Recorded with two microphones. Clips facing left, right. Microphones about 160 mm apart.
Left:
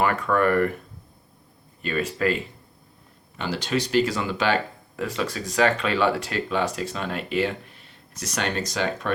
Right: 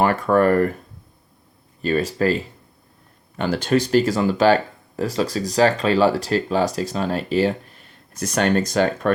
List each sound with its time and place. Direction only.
0.0 s speech: 35° right (ahead or behind)
1.8 s speech: 35° right (ahead or behind)
3.3 s speech: 50° right (ahead or behind)